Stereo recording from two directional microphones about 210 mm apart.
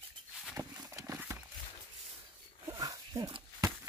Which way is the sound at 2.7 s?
15° right (ahead or behind).